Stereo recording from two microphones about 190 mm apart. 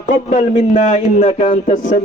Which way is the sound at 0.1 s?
40° left (ahead or behind).